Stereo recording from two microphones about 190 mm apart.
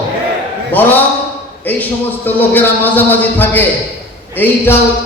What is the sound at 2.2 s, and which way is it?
A man's voice, 10° left (ahead or behind).